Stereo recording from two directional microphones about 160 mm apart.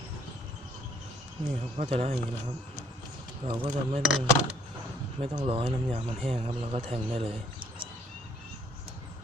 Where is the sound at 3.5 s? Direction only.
40° right (ahead or behind).